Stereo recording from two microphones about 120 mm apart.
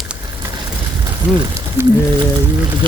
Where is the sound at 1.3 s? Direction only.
5° right (ahead or behind).